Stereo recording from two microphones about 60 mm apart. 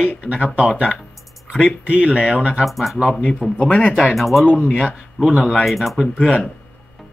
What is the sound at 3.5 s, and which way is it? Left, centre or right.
Speech, left.